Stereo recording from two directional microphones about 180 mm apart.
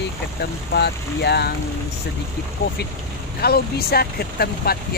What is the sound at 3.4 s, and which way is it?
Speech, 60° left (ahead or behind).